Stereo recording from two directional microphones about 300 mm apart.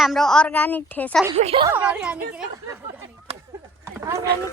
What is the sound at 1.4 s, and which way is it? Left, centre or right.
Speech, centre.